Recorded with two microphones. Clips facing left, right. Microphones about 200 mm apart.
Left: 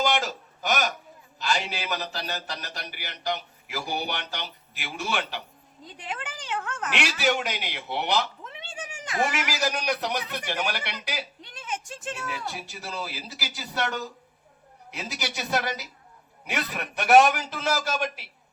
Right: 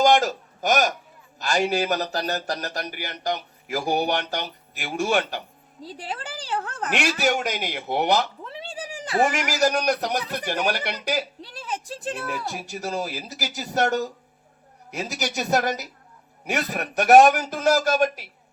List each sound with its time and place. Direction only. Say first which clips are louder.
0.0 s a woman's voice: right 7 dB; 45° right (ahead or behind)
5.8 s a woman's voice: right 3 dB; 35° right (ahead or behind)
11.3 s a woman's voice: right 3 dB; 35° right (ahead or behind)